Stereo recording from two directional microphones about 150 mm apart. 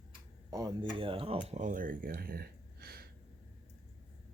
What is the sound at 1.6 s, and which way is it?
Speech, 60° right (ahead or behind).